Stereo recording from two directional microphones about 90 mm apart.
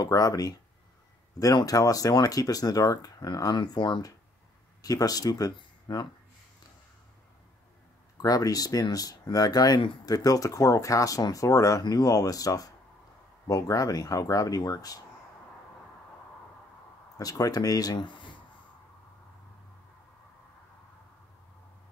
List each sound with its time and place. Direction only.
0.0 s speech: 40° left (ahead or behind); by 4.1 s 55° left (ahead or behind)
4.8 s speech: 40° left (ahead or behind)
5.6 s a sound: 50° left (ahead or behind)
8.2 s speech: 45° left (ahead or behind)
17.2 s speech: 45° left (ahead or behind)
17.9 s speech: 65° left (ahead or behind)